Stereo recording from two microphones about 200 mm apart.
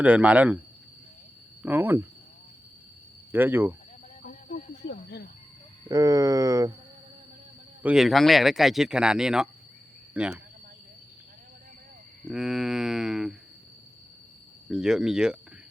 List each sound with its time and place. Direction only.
0.0 s speech: 5° right (ahead or behind)
1.6 s speech: 10° right (ahead or behind)
3.3 s speech: 10° right (ahead or behind)
4.2 s snake: 40° left (ahead or behind)
5.0 s speech: 55° left (ahead or behind)
5.9 s speech: 15° right (ahead or behind)
7.8 s speech: 5° right (ahead or behind)
12.3 s speech: centre (ahead or behind)
14.7 s speech: 5° right (ahead or behind)